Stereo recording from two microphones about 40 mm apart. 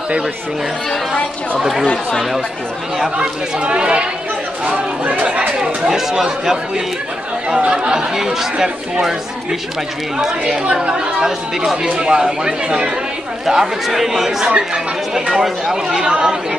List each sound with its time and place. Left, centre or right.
1.6 s speech: centre
3.2 s speech: right
5.6 s speech: centre
7.4 s speech: right
10.1 s speech: centre
13.5 s speech: centre